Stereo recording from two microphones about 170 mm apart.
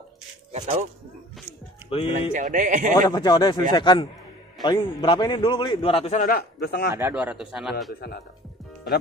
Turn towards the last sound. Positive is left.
turn(degrees=-5)  # may be behind; listen again after turning